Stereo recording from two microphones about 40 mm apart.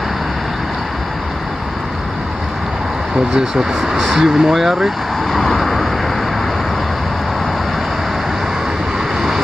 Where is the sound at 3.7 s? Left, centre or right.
Centre.